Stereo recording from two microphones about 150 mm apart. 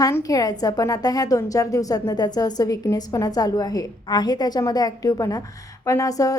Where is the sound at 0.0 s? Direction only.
20° left (ahead or behind).